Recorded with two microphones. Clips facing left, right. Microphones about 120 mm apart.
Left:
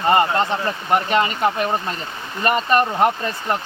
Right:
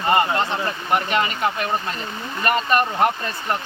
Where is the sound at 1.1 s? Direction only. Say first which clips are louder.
Left 3 dB; 30° left (ahead or behind).